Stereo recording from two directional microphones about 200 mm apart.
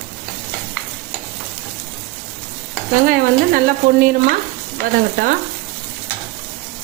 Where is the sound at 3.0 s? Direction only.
45° right (ahead or behind).